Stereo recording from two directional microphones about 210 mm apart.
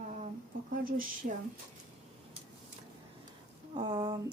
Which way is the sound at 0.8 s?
40° right (ahead or behind).